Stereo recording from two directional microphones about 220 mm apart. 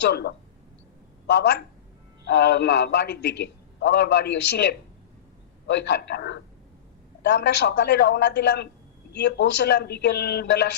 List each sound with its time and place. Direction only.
0.0 s a man's voice: 50° left (ahead or behind)